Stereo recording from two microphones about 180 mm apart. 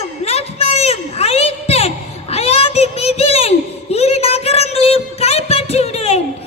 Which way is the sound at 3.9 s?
35° left (ahead or behind).